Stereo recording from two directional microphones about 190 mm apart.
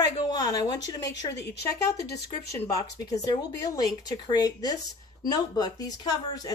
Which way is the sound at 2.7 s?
20° left (ahead or behind).